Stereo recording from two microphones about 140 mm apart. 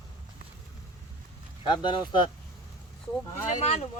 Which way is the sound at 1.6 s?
30° left (ahead or behind).